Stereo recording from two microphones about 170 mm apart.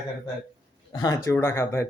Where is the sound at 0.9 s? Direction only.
20° left (ahead or behind).